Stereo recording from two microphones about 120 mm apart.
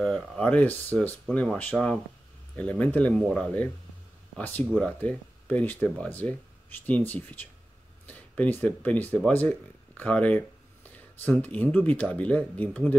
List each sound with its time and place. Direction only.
0.0 s speech: 10° left (ahead or behind)